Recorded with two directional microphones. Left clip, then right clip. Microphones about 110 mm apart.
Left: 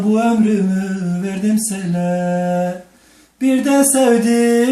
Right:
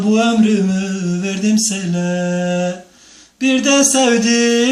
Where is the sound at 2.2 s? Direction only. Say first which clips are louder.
Even; 10° right (ahead or behind).